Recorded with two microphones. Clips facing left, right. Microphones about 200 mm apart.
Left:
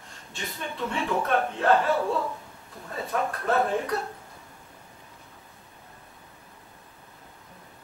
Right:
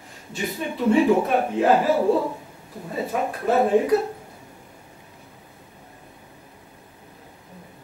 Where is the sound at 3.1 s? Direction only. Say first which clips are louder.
Right 4 dB; 15° right (ahead or behind).